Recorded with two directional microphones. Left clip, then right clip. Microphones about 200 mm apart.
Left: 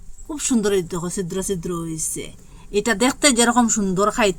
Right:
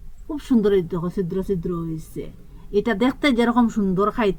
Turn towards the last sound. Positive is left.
turn(degrees=25)  # may be behind; listen again after turning